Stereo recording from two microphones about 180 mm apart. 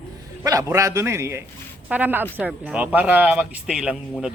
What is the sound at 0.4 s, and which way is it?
Speech, 20° right (ahead or behind).